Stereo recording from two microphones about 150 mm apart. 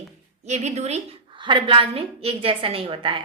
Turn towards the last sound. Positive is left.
turn(degrees=-35)  # may be behind; listen again after turning